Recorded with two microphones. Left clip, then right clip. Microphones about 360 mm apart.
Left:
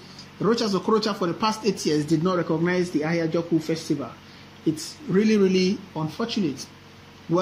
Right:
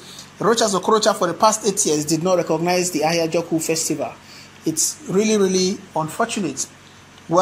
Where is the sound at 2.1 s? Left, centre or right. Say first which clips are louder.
Right 5 dB; right.